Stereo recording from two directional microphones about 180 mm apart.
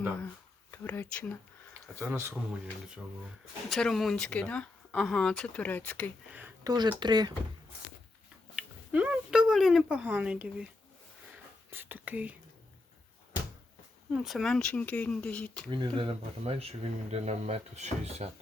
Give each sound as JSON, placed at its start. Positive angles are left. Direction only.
{"t": 0.7, "sound": "speech", "side_deg": 10}
{"t": 2.0, "sound": "speech", "side_deg": -15}
{"t": 3.7, "sound": "speech", "side_deg": 0}
{"t": 6.7, "sound": "speech", "side_deg": -25}
{"t": 8.5, "sound": "a sound", "side_deg": -10}
{"t": 11.7, "sound": "speech", "side_deg": -10}
{"t": 14.1, "sound": "speech", "side_deg": 0}
{"t": 15.7, "sound": "speech", "side_deg": -25}